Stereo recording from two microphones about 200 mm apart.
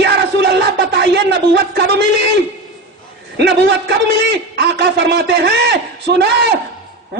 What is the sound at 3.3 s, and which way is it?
A man's voice, 55° right (ahead or behind).